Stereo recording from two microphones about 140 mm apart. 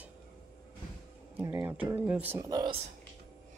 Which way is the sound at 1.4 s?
20° right (ahead or behind).